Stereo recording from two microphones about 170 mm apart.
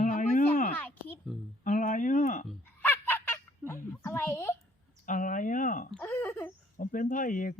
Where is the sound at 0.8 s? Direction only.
10° left (ahead or behind).